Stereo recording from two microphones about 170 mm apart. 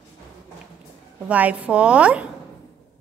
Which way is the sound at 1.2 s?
10° right (ahead or behind).